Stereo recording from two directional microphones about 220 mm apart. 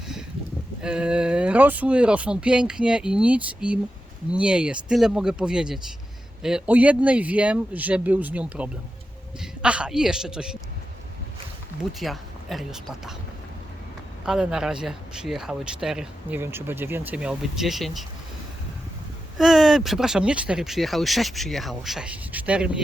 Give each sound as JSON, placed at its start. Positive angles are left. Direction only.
{"t": 0.8, "sound": "speech", "side_deg": -5}
{"t": 11.9, "sound": "speech", "side_deg": 0}
{"t": 14.3, "sound": "speech", "side_deg": -5}
{"t": 19.4, "sound": "speech", "side_deg": 0}